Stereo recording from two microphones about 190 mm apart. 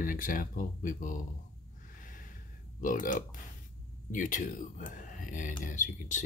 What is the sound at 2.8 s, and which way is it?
Speech, 45° left (ahead or behind).